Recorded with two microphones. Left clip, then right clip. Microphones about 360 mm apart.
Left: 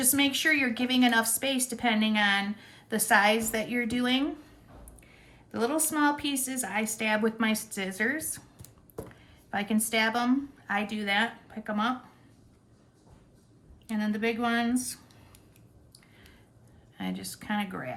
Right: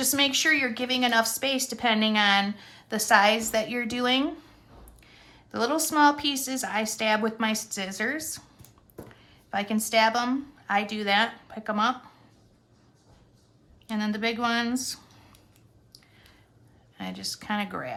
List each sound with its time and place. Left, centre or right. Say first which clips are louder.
0.0 s a woman's voice: right 3 dB; centre
5.5 s a woman's voice: right 3 dB; centre
9.5 s a woman's voice: right 3 dB; centre
13.8 s a woman's voice: right 2 dB; centre
17.0 s speech: right 3 dB; centre